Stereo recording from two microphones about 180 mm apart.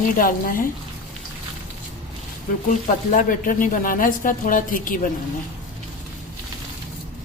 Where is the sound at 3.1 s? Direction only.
50° left (ahead or behind).